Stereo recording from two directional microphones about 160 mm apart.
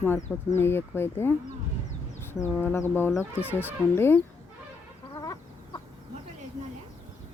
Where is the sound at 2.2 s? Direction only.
15° left (ahead or behind).